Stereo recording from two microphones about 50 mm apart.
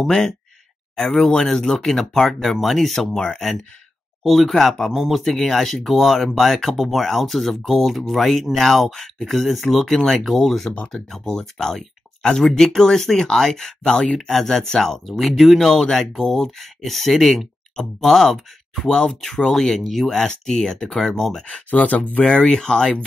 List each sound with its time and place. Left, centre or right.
0.0 s speech: centre
4.9 s speech: centre
5.2 s speech: centre
21.6 s speech: left
22.2 s speech: centre